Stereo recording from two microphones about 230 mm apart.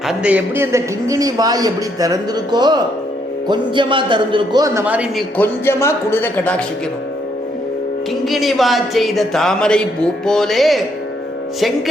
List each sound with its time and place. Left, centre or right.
0.1 s a man's voice: centre
5.4 s speech: centre
8.2 s speech: centre